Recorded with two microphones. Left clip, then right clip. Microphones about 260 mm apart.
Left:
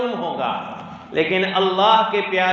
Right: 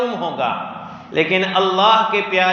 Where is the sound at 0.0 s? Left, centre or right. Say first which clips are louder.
Right 2 dB; right.